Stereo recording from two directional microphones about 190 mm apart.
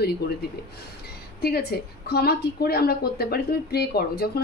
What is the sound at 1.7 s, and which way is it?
A woman's voice, 55° left (ahead or behind).